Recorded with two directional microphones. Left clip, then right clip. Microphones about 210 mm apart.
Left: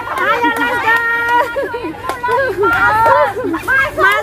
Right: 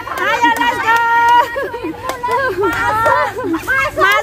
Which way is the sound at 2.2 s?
45° right (ahead or behind).